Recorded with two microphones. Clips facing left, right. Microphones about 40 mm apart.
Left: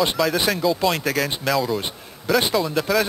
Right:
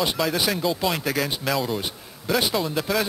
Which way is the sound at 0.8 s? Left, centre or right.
Centre.